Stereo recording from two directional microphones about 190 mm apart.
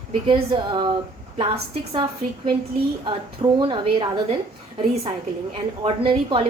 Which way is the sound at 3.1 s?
25° right (ahead or behind).